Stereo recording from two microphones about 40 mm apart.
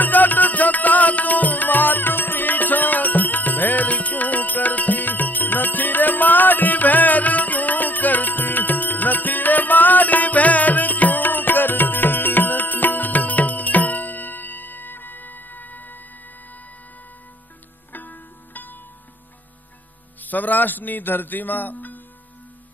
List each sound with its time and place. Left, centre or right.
0.0 s music: left
17.9 s music: left
20.2 s speech: left